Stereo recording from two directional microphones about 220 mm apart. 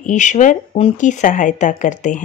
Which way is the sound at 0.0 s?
35° left (ahead or behind).